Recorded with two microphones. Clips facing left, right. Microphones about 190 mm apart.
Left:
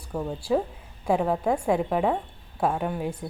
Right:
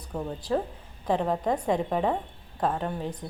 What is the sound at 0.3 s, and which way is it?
A woman's voice, 10° left (ahead or behind).